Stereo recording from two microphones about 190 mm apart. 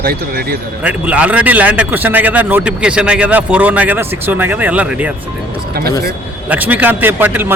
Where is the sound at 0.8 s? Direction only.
10° right (ahead or behind).